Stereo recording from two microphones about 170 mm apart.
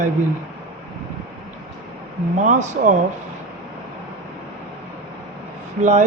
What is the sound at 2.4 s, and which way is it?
Speech, 45° right (ahead or behind).